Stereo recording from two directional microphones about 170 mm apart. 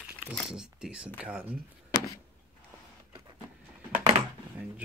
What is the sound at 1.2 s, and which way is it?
Speech, 5° right (ahead or behind).